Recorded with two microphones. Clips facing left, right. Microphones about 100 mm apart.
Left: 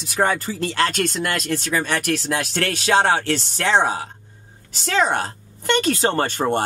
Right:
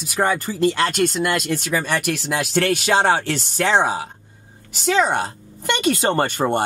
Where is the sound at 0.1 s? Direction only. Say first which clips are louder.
Even; 5° right (ahead or behind).